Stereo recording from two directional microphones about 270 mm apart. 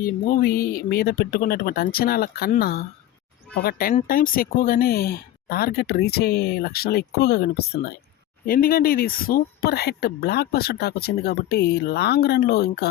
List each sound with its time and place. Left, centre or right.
0.0 s speech: left